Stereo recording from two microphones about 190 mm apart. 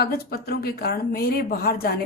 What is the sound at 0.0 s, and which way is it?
A woman's voice, 55° left (ahead or behind).